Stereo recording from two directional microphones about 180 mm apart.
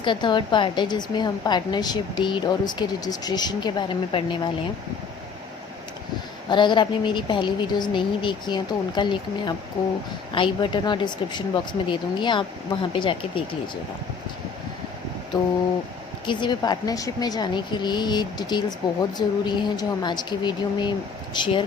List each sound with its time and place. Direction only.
0.0 s a woman's voice: 25° left (ahead or behind)
6.5 s a woman's voice: 25° left (ahead or behind)
16.2 s a woman's voice: 25° left (ahead or behind)